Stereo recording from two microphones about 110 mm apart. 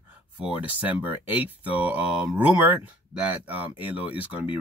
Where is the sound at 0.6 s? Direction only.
15° right (ahead or behind).